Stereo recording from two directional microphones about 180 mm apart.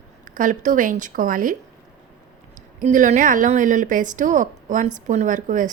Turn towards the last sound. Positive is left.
turn(degrees=-45)  # may be behind; listen again after turning